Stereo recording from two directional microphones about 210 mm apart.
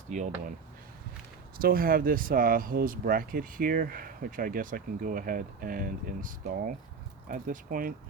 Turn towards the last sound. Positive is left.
turn(degrees=-40)  # may be behind; listen again after turning